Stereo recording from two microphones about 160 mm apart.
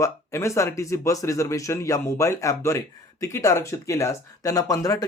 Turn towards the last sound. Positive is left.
turn(degrees=20)  # may be behind; listen again after turning